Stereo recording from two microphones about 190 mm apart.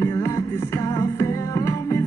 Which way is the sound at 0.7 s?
20° left (ahead or behind).